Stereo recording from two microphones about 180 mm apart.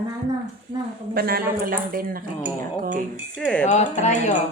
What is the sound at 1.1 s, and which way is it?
Speech, 55° right (ahead or behind).